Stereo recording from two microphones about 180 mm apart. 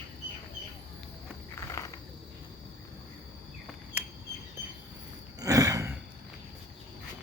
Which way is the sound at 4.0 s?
10° right (ahead or behind).